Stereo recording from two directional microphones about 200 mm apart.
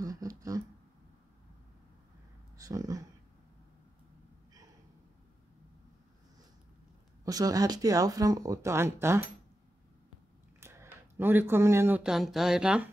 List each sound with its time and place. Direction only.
0.0 s a sound: 15° right (ahead or behind)
2.5 s speech: 15° right (ahead or behind)
7.2 s speech: 20° right (ahead or behind)
10.6 s speech: 10° right (ahead or behind)